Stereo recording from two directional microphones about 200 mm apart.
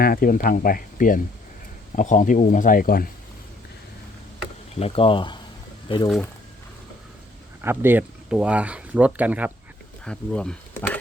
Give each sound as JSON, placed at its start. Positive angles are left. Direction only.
{"t": 0.0, "sound": "speech", "side_deg": 45}
{"t": 4.8, "sound": "speech", "side_deg": 30}
{"t": 7.6, "sound": "speech", "side_deg": -10}
{"t": 10.0, "sound": "speech", "side_deg": 5}